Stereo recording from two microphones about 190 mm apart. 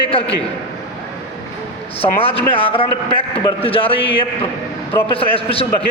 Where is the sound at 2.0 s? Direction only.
30° left (ahead or behind).